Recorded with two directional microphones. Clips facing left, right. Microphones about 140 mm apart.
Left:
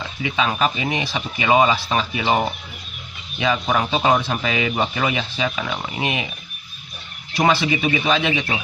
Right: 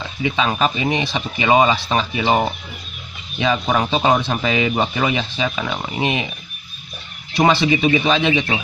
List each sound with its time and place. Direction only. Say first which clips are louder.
0.2 s speech: right 2 dB; 30° right (ahead or behind)
7.3 s speech: right 3 dB; 25° right (ahead or behind)